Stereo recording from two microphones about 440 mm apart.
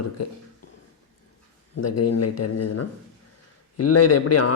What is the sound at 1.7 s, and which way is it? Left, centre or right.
Speech, left.